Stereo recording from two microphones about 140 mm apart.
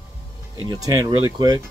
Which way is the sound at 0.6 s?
30° right (ahead or behind).